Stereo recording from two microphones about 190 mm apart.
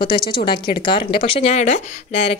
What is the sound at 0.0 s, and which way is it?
Speech, 25° left (ahead or behind).